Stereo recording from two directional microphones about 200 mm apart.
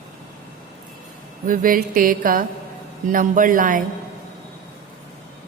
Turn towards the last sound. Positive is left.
turn(degrees=-40)  # may be behind; listen again after turning